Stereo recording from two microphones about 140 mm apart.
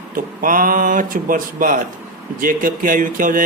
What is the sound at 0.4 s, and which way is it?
Speech, 80° right.